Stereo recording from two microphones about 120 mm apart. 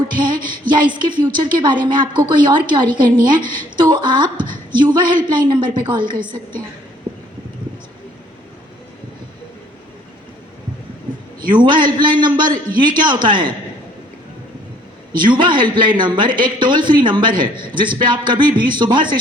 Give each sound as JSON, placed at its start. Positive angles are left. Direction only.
{"t": 0.2, "sound": "a woman's voice", "side_deg": -40}
{"t": 11.4, "sound": "a woman's voice", "side_deg": -40}
{"t": 15.2, "sound": "a woman's voice", "side_deg": -40}